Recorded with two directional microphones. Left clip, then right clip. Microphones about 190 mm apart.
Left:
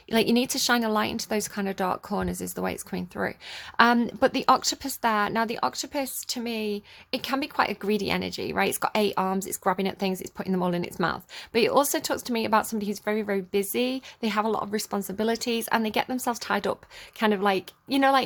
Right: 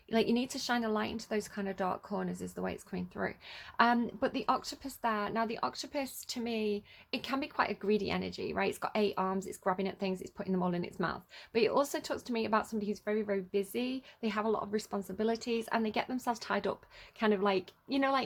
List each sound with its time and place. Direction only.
0.1 s speech: 35° left (ahead or behind)